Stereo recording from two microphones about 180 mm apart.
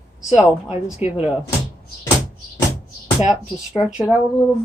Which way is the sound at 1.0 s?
35° left (ahead or behind).